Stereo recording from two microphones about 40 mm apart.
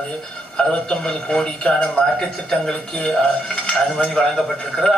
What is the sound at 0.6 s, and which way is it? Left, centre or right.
A man's voice, left.